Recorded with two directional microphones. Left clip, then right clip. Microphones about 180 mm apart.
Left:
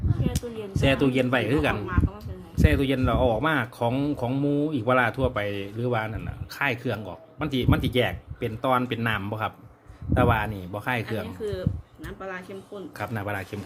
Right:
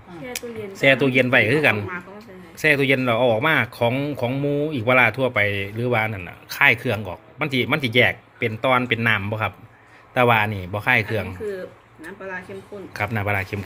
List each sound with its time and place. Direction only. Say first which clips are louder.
0.3 s speech: right 4 dB; 10° left (ahead or behind)
12.0 s speech: right 3 dB; 75° left (ahead or behind)
12.9 s speech: right 8 dB; 5° right (ahead or behind)